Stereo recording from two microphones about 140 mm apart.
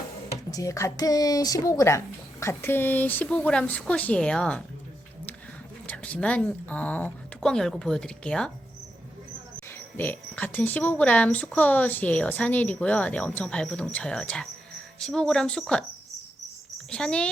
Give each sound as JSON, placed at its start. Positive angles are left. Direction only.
{"t": 0.5, "sound": "speech", "side_deg": 25}
{"t": 5.9, "sound": "speech", "side_deg": 10}
{"t": 9.7, "sound": "speech", "side_deg": 15}
{"t": 16.9, "sound": "a child's voice", "side_deg": 5}